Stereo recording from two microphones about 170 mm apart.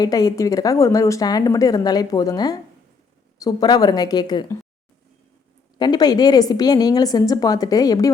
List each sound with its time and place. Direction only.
0.0 s a woman's voice: 20° left (ahead or behind)
5.8 s a woman's voice: 25° left (ahead or behind)